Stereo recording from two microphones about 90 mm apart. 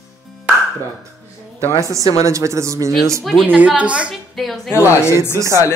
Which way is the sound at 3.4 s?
20° right (ahead or behind).